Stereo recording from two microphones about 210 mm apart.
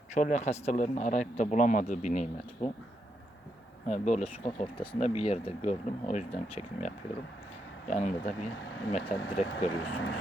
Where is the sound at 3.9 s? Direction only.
35° left (ahead or behind).